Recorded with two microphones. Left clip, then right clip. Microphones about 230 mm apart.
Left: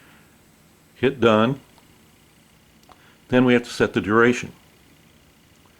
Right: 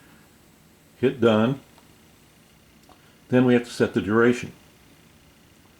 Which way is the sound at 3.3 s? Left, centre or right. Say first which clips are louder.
Left 2 dB; centre.